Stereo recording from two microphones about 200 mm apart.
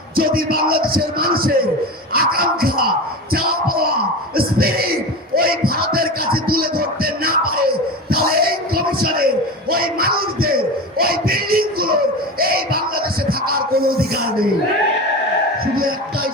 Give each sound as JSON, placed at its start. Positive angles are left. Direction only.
{"t": 0.2, "sound": "music", "side_deg": -50}
{"t": 3.3, "sound": "a sound", "side_deg": -50}
{"t": 5.3, "sound": "music", "side_deg": -50}
{"t": 8.1, "sound": "a sound", "side_deg": -50}
{"t": 13.5, "sound": "music", "side_deg": -50}
{"t": 15.6, "sound": "music", "side_deg": -45}